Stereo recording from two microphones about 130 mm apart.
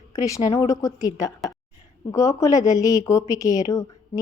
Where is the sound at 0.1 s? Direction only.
25° left (ahead or behind).